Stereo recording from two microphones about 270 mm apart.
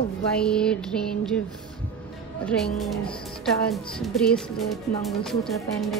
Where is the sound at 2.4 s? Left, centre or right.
Centre.